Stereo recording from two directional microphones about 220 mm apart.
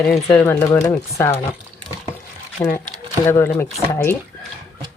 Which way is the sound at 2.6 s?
25° left (ahead or behind).